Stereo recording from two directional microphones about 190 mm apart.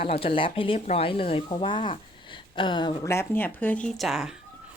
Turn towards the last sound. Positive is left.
turn(degrees=0)  # may be behind; listen again after turning